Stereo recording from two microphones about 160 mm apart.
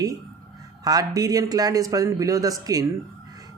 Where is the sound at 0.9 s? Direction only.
25° right (ahead or behind).